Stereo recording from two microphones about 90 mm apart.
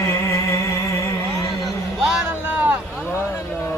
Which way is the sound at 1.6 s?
Centre (ahead or behind).